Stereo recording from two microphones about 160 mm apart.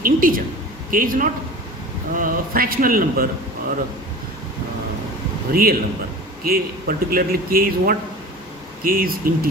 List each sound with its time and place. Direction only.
0.0 s a man's voice: 60° right (ahead or behind)
5.5 s a man's voice: 70° right (ahead or behind)